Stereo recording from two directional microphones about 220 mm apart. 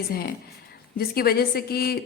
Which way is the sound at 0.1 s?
45° left (ahead or behind).